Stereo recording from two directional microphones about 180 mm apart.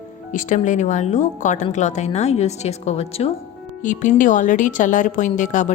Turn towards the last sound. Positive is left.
turn(degrees=45)  # may be behind; listen again after turning